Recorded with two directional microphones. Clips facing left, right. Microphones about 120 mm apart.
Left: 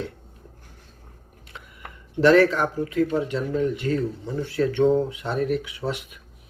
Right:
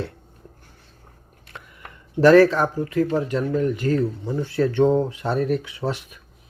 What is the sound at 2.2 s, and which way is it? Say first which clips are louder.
Speech: right 3 dB; 35° right (ahead or behind).